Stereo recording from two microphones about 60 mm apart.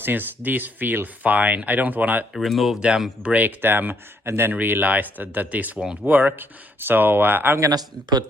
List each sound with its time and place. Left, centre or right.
0.0 s speech: right
2.3 s speech: centre
3.2 s speech: right
4.5 s speech: right
6.1 s speech: right